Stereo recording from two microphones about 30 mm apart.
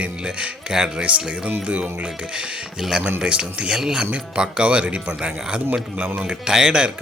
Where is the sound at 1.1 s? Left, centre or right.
Right.